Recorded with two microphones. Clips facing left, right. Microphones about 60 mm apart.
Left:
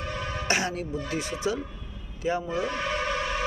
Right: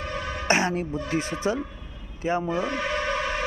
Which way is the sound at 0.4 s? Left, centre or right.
Right.